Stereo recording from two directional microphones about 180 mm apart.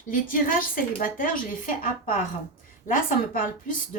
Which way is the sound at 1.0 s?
50° left (ahead or behind).